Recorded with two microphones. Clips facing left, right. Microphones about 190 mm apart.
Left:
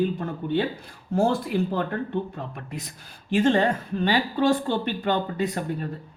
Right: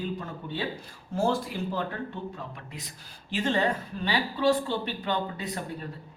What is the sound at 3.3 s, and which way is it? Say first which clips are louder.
A man's voice: left 6 dB; 50° left (ahead or behind).